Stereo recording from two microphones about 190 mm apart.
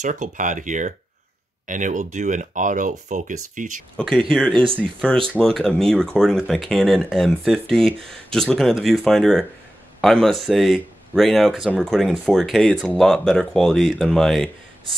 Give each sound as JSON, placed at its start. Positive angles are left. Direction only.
{"t": 0.0, "sound": "speech", "side_deg": -40}
{"t": 3.9, "sound": "speech", "side_deg": 0}